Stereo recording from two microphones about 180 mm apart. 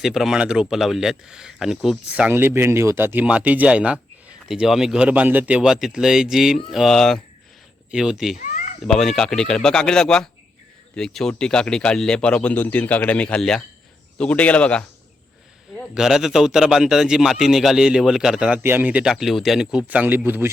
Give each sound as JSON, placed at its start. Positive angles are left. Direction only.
{"t": 0.0, "sound": "speech", "side_deg": 0}
{"t": 8.4, "sound": "a sound", "side_deg": 45}
{"t": 8.8, "sound": "a man's voice", "side_deg": 0}
{"t": 16.0, "sound": "speech", "side_deg": 0}